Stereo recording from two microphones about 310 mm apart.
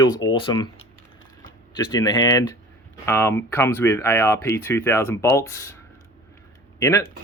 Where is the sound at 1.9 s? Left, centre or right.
Centre.